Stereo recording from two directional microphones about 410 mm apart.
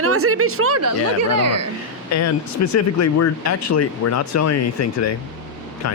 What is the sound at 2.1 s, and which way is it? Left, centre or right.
A man's voice, left.